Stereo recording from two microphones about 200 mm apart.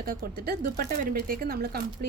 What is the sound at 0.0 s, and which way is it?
Speech, 45° right (ahead or behind).